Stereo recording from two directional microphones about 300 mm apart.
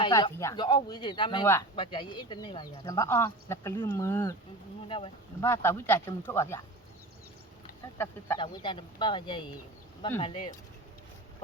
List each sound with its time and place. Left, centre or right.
0.0 s speech: centre
7.9 s speech: centre